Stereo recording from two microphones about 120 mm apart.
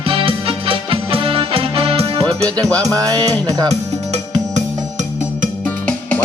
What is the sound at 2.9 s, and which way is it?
Music, 30° right (ahead or behind).